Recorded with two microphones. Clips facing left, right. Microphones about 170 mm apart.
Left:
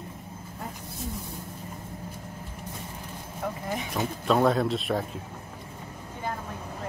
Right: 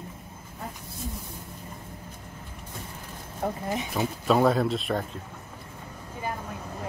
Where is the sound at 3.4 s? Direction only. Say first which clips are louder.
Right 3 dB; 35° right (ahead or behind).